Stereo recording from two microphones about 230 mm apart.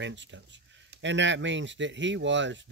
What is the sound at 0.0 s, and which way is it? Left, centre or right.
Speech, right.